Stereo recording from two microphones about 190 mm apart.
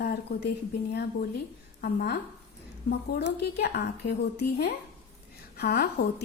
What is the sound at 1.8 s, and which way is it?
Speech, 60° left (ahead or behind).